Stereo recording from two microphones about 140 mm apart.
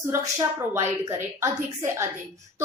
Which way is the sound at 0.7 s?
20° right (ahead or behind).